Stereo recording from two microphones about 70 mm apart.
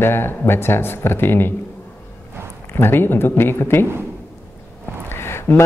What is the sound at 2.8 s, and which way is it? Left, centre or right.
Mantra, left.